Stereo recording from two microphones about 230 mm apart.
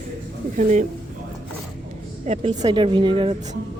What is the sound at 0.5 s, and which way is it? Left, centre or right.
Speech, right.